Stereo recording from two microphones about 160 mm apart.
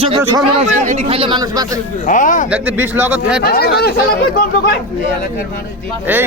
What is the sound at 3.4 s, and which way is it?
Speech, 80° left.